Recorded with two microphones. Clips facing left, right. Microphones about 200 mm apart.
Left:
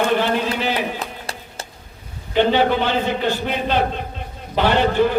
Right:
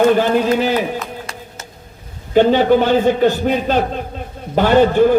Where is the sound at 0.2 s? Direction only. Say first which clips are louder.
Right 6 dB; 45° right (ahead or behind).